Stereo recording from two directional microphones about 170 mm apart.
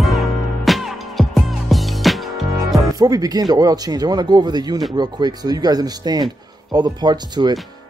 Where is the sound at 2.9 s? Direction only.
20° right (ahead or behind).